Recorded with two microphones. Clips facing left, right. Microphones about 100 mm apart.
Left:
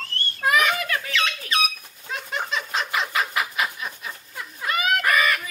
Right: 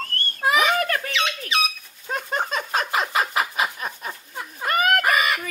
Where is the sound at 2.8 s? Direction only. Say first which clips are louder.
Right 2 dB; 30° right (ahead or behind).